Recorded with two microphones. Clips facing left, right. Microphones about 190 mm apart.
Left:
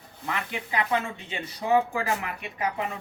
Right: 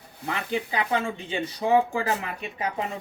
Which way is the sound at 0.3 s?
35° right (ahead or behind).